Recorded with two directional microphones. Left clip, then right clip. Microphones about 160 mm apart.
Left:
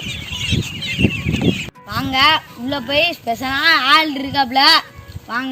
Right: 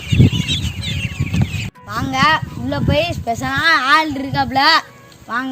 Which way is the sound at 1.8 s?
10° right (ahead or behind).